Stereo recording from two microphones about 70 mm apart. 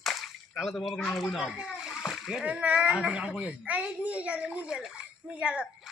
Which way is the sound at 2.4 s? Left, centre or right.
Centre.